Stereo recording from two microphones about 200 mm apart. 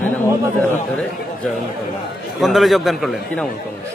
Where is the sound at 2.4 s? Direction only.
Centre (ahead or behind).